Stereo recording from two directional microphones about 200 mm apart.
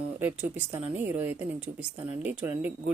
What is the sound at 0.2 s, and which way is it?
Speech, 10° right (ahead or behind).